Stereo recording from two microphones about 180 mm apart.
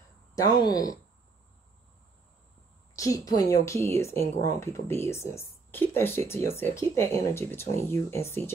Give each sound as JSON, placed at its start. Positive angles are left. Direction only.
{"t": 0.4, "sound": "speech", "side_deg": 20}
{"t": 3.0, "sound": "speech", "side_deg": 20}